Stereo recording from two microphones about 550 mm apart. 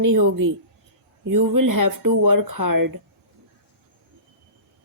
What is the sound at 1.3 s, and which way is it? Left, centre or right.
Speech, right.